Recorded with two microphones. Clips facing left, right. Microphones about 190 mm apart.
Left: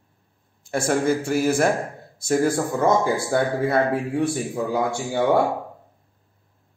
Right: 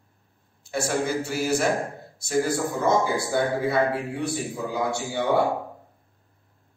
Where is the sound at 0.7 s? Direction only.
55° left (ahead or behind).